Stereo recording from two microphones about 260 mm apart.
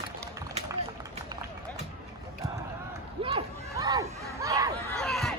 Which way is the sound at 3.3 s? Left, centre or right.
Centre.